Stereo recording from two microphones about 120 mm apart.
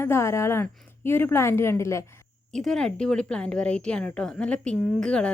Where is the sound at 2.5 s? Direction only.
5° left (ahead or behind).